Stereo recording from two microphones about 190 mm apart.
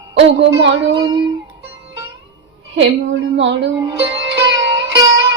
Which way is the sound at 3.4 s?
70° right (ahead or behind).